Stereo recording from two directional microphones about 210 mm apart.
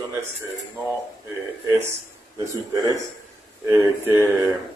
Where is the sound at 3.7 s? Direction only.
15° right (ahead or behind).